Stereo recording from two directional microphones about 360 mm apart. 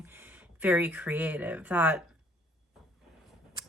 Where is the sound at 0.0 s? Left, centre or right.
Centre.